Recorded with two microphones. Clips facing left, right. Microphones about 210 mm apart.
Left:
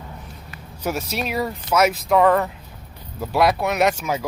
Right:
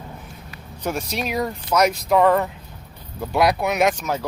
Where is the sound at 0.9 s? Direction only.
5° left (ahead or behind).